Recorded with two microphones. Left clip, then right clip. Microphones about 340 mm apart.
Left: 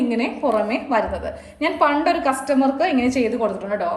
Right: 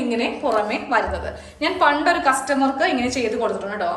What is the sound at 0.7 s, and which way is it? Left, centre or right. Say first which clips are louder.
A woman's voice: even; centre.